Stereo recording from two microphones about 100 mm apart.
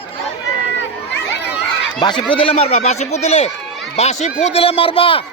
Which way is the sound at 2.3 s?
70° left (ahead or behind).